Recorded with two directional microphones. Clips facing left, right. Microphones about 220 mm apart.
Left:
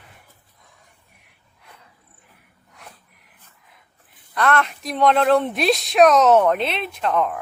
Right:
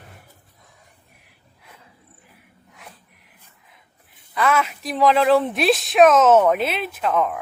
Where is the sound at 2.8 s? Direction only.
Centre (ahead or behind).